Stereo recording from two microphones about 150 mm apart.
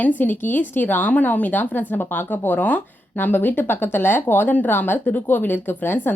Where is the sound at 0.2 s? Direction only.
10° left (ahead or behind).